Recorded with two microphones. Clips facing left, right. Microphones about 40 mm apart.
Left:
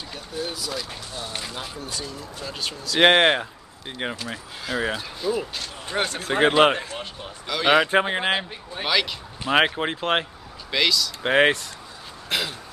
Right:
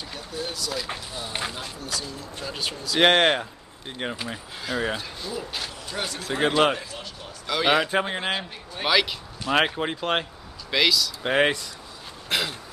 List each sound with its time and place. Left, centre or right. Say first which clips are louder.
0.1 s speech: left 2 dB; centre
1.1 s speech: left 3 dB; centre
2.4 s speech: right 1 dB; centre
3.0 s speech: left 2 dB; centre
5.9 s speech: left 6 dB; left
7.4 s speech: left 2 dB; centre
7.9 s speech: left 4 dB; centre
8.8 s speech: right 1 dB; centre
9.4 s speech: left 2 dB; centre
10.7 s speech: even; centre
11.2 s speech: left 3 dB; centre
12.3 s a sound: even; centre